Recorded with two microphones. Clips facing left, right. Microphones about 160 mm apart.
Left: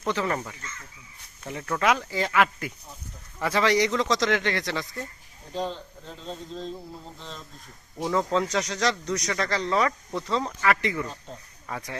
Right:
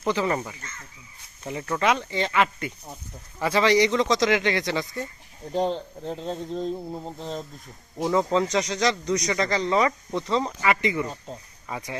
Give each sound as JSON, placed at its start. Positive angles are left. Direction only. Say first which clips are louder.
{"t": 0.0, "sound": "speech", "louder": "right 3 dB", "side_deg": -5}
{"t": 5.5, "sound": "speech", "louder": "right 6 dB", "side_deg": -50}
{"t": 8.0, "sound": "speech", "louder": "right 3 dB", "side_deg": -5}